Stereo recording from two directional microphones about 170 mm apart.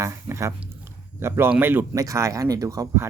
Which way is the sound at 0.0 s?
15° right (ahead or behind).